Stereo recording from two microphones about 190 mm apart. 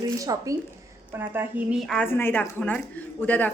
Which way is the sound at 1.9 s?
10° left (ahead or behind).